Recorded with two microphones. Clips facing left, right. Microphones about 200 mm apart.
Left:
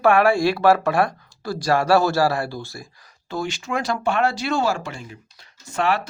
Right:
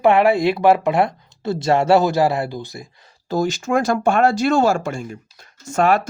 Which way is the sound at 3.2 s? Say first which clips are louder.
Right 7 dB; 40° right (ahead or behind).